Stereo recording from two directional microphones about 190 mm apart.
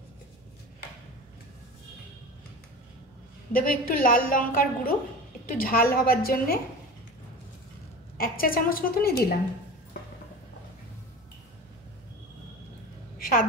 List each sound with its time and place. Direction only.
3.5 s a woman's voice: 50° left (ahead or behind)
8.2 s a woman's voice: 50° left (ahead or behind)
13.2 s a sound: 50° left (ahead or behind)